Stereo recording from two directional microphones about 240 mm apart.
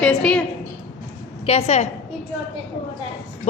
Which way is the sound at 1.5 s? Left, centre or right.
Left.